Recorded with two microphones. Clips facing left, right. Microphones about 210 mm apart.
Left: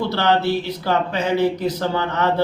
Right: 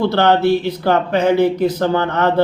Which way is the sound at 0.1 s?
55° right (ahead or behind).